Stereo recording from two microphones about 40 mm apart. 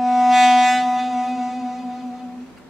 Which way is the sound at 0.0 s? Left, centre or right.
Centre.